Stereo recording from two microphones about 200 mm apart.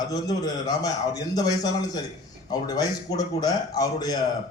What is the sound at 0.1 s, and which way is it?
Speech, 20° left (ahead or behind).